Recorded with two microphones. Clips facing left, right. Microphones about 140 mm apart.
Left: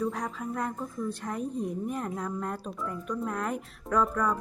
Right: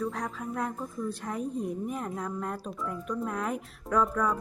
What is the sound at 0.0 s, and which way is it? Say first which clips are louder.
A woman's voice: left 1 dB; centre (ahead or behind).